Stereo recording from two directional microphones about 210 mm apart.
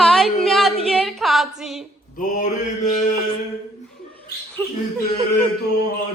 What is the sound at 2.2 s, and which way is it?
Mantra, 40° left (ahead or behind).